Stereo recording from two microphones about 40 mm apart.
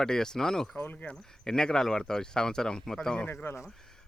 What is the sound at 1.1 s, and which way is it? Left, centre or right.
Speech, centre.